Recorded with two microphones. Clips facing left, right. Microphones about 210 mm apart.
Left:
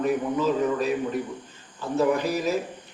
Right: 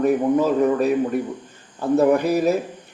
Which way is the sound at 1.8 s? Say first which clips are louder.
Right 6 dB; 60° right (ahead or behind).